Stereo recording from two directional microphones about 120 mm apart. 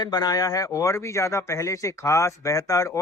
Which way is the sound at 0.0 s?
35° left (ahead or behind).